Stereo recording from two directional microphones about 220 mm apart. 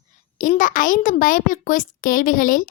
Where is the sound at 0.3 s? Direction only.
35° left (ahead or behind).